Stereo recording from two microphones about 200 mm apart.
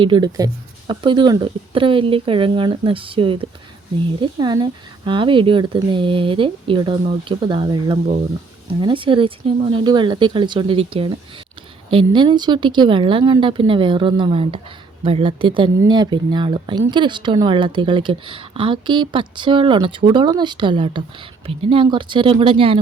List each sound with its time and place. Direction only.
0.0 s speech: 20° right (ahead or behind)